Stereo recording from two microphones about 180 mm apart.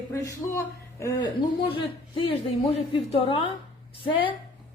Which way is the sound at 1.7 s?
30° left (ahead or behind).